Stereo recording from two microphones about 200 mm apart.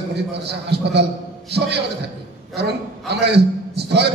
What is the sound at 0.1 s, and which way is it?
Speech, 55° right (ahead or behind).